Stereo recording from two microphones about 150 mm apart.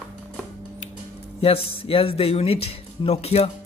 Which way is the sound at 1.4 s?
40° left (ahead or behind).